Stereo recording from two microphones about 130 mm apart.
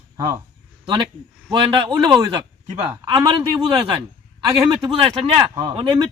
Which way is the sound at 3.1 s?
30° right (ahead or behind).